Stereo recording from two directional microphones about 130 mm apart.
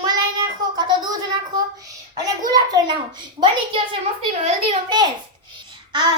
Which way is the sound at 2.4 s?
30° right (ahead or behind).